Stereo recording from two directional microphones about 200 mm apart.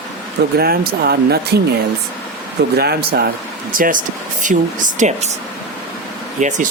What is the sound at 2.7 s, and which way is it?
Speech, 55° right (ahead or behind).